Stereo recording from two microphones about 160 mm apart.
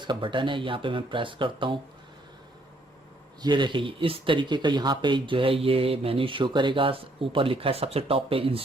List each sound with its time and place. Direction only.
0.0 s speech: 30° right (ahead or behind)
3.4 s speech: 30° right (ahead or behind)